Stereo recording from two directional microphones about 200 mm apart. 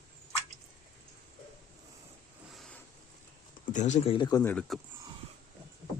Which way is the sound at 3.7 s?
35° left (ahead or behind).